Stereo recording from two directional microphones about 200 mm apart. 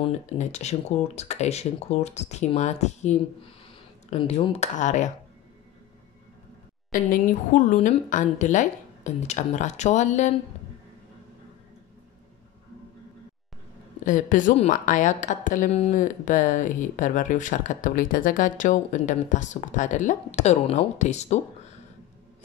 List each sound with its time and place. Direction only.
0.3 s speech: 35° left (ahead or behind)
6.9 s speech: 40° left (ahead or behind)
14.0 s speech: 40° left (ahead or behind)